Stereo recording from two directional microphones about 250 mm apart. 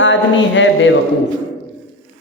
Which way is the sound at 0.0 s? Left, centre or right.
Left.